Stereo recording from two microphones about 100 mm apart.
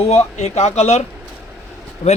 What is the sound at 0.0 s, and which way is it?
Speech, 85° left.